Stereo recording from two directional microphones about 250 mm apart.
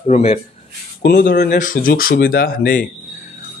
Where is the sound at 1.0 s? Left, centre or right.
Left.